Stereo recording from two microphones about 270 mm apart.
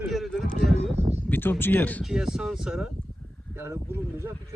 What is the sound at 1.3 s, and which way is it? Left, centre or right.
Speech, centre.